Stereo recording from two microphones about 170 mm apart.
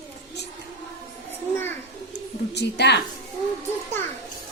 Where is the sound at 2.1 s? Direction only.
80° left.